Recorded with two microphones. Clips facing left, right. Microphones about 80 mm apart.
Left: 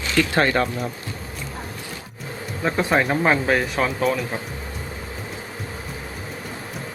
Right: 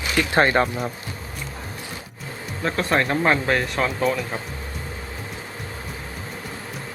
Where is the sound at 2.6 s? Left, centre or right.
Centre.